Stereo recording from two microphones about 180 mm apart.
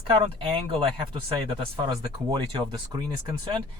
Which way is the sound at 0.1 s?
30° right (ahead or behind).